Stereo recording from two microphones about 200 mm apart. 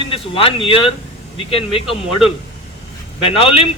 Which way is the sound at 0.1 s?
25° left (ahead or behind).